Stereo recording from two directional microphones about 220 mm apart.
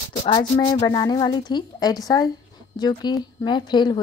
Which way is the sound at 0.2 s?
20° left (ahead or behind).